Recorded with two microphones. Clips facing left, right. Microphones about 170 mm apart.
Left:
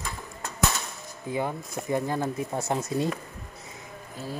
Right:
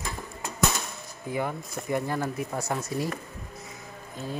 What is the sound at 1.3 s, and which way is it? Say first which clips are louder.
Speech: left 1 dB; 20° left (ahead or behind).